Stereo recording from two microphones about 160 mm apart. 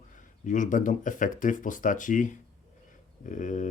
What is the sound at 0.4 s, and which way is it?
Speech, 55° left (ahead or behind).